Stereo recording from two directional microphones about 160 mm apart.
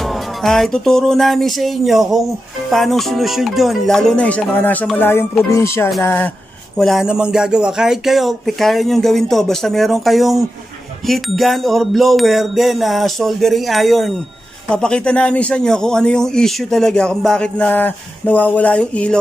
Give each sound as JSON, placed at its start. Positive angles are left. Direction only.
{"t": 0.0, "sound": "music", "side_deg": 0}
{"t": 2.7, "sound": "a man's voice", "side_deg": 0}
{"t": 4.9, "sound": "music", "side_deg": 15}
{"t": 6.8, "sound": "a man's voice", "side_deg": 0}